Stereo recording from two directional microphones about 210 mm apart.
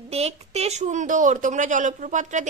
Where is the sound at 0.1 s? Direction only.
30° right (ahead or behind).